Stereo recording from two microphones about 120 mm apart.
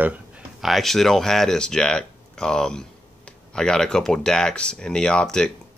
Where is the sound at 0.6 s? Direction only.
Centre (ahead or behind).